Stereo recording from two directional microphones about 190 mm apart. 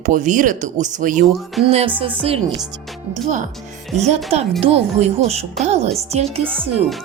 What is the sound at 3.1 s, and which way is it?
Speech, 40° right (ahead or behind).